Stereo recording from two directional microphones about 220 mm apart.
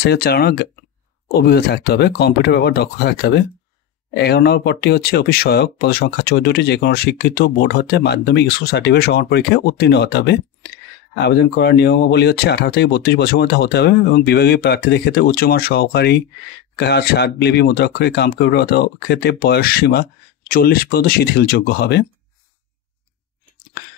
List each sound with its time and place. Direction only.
0.0 s speech: 45° left (ahead or behind)